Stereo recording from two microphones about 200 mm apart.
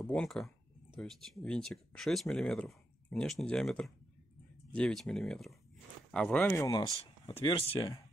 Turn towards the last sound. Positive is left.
turn(degrees=25)  # may be behind; listen again after turning